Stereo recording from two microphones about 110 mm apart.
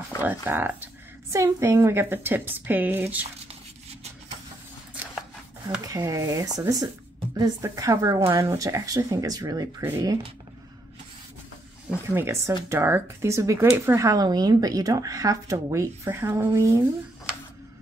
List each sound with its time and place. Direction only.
0.2 s speech: 15° right (ahead or behind)
5.9 s speech: 30° right (ahead or behind)
12.1 s speech: 25° right (ahead or behind)